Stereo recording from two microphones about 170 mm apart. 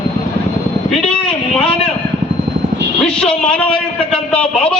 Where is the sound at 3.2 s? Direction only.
5° left (ahead or behind).